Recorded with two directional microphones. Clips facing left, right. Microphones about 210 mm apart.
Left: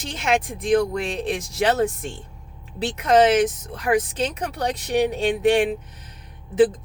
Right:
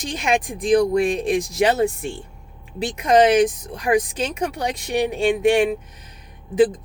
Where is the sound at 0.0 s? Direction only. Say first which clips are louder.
Right 1 dB; 15° right (ahead or behind).